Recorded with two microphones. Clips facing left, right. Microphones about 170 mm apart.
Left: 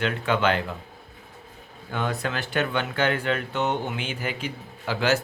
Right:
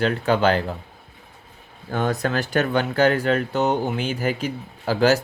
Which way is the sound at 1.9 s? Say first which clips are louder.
Right 5 dB; 40° right (ahead or behind).